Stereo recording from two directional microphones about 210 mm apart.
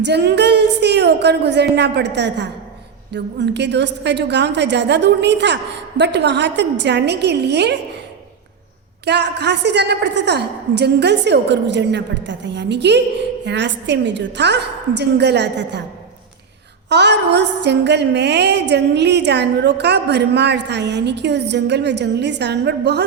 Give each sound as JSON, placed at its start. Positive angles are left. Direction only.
{"t": 0.0, "sound": "a woman's voice", "side_deg": -55}
{"t": 9.0, "sound": "a woman's voice", "side_deg": -55}
{"t": 16.9, "sound": "a woman's voice", "side_deg": -55}